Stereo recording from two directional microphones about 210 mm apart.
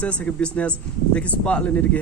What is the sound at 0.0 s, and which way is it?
A man's voice, 5° left (ahead or behind).